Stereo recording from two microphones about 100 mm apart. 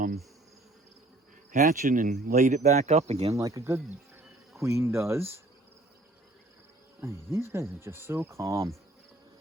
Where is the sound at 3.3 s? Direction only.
30° right (ahead or behind).